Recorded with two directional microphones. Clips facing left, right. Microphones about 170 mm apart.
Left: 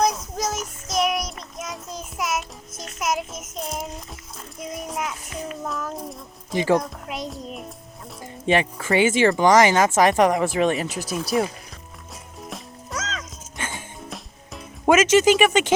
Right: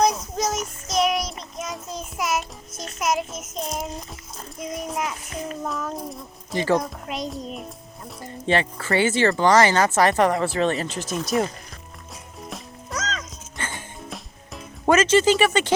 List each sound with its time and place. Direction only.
0.0 s child singing: centre (ahead or behind)
4.6 s a sound: centre (ahead or behind)
5.6 s music: centre (ahead or behind)
6.5 s speech: 15° left (ahead or behind)
6.7 s a child's voice: centre (ahead or behind)
8.2 s speech: 15° left (ahead or behind)
12.4 s music: centre (ahead or behind)
14.9 s speech: 10° left (ahead or behind)